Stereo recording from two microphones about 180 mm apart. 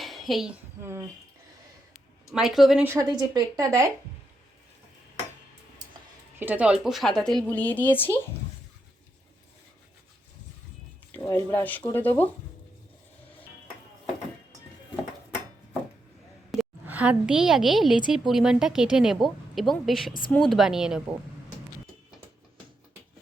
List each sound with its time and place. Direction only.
0.0 s a sound: centre (ahead or behind)
0.8 s speech: 15° right (ahead or behind)
2.3 s a woman's voice: centre (ahead or behind)
2.8 s speech: 15° right (ahead or behind)
6.4 s a woman's voice: 10° right (ahead or behind); by 8.2 s 10° left (ahead or behind)
11.1 s speech: 10° left (ahead or behind)
16.5 s a woman's voice: 5° right (ahead or behind)